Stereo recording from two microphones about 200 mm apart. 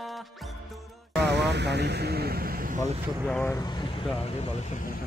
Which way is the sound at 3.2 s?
5° left (ahead or behind).